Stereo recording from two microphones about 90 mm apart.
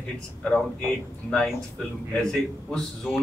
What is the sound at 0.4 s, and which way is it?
Speech, 5° left (ahead or behind).